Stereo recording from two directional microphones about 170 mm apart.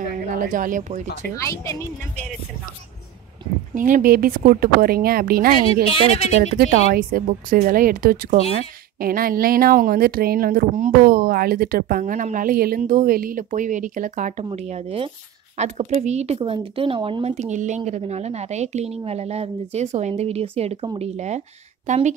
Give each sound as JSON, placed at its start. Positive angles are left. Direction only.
{"t": 0.3, "sound": "speech", "side_deg": -50}
{"t": 1.3, "sound": "speech", "side_deg": 20}
{"t": 3.7, "sound": "speech", "side_deg": -50}
{"t": 5.9, "sound": "speech", "side_deg": 35}
{"t": 6.5, "sound": "speech", "side_deg": -60}
{"t": 21.8, "sound": "speech", "side_deg": -45}